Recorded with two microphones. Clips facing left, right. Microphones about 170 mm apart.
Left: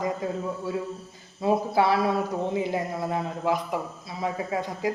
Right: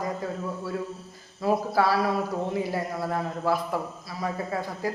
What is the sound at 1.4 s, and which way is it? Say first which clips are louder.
A man's voice: left 1 dB; 20° left (ahead or behind).